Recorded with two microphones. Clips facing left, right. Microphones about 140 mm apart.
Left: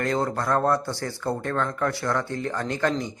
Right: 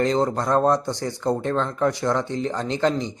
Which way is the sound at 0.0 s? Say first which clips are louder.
Right 4 dB; 20° right (ahead or behind).